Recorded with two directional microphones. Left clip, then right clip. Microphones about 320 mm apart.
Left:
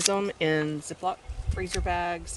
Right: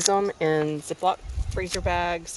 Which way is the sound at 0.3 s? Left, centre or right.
Centre.